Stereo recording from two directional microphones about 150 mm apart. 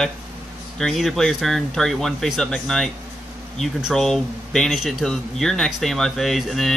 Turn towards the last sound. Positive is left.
turn(degrees=0)  # may be behind; listen again after turning